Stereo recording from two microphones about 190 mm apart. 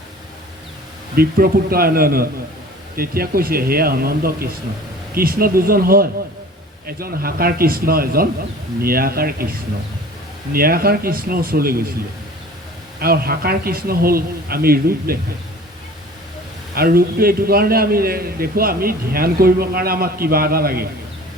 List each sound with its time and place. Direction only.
1.1 s a man's voice: 50° right (ahead or behind)
13.0 s a man's voice: 50° right (ahead or behind)
16.7 s a man's voice: 50° right (ahead or behind)